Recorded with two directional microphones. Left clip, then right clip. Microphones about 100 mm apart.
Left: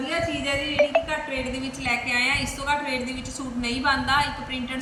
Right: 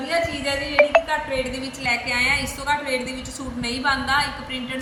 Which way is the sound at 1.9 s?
40° right (ahead or behind).